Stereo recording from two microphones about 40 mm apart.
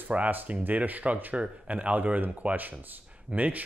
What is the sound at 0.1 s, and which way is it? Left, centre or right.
Speech, right.